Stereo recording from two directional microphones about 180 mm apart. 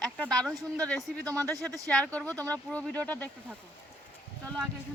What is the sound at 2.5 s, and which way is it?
Speech, 5° left (ahead or behind).